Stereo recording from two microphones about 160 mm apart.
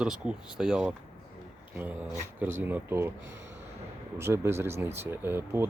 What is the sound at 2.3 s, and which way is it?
Speech, 10° right (ahead or behind).